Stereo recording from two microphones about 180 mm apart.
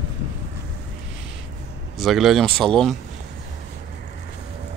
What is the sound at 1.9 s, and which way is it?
Speech, centre (ahead or behind).